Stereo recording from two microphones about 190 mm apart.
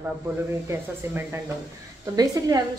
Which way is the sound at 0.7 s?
15° right (ahead or behind).